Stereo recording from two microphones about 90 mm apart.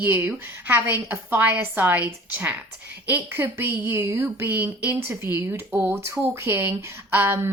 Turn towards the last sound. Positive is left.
turn(degrees=-25)  # may be behind; listen again after turning